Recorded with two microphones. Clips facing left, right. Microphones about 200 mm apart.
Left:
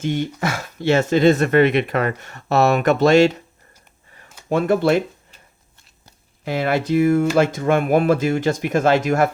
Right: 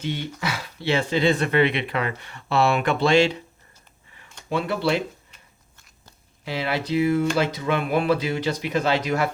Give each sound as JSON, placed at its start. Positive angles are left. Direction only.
{"t": 0.0, "sound": "speech", "side_deg": 50}
{"t": 4.4, "sound": "speech", "side_deg": 45}
{"t": 6.4, "sound": "speech", "side_deg": 50}